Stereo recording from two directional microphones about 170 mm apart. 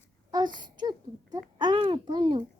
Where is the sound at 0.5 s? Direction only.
25° right (ahead or behind).